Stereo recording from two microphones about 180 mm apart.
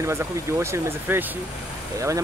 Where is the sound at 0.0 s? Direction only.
15° right (ahead or behind).